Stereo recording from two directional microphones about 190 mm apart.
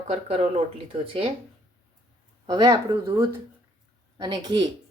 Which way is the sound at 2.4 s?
20° right (ahead or behind).